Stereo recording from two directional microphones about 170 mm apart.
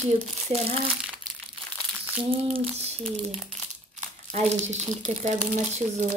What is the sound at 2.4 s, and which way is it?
Speech, 35° right (ahead or behind).